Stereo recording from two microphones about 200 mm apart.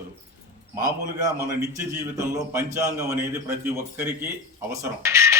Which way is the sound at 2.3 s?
15° right (ahead or behind).